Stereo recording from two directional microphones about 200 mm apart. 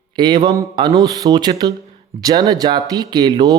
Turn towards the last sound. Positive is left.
turn(degrees=-20)  # may be behind; listen again after turning